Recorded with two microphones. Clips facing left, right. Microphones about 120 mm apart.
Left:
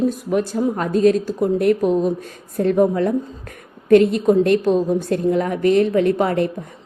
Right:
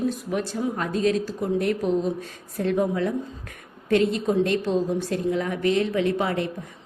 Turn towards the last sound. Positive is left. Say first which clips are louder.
# left 6 dB
turn(degrees=50)  # may be behind; listen again after turning